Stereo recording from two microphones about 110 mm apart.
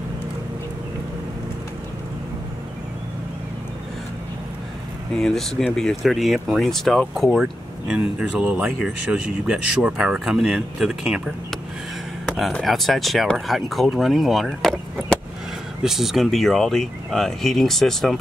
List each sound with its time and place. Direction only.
5.1 s speech: 5° left (ahead or behind); by 9.2 s 20° right (ahead or behind)
9.5 s speech: 5° right (ahead or behind)
12.4 s speech: centre (ahead or behind)
15.8 s speech: centre (ahead or behind)